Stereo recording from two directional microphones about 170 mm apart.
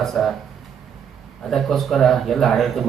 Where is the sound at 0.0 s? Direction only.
Centre (ahead or behind).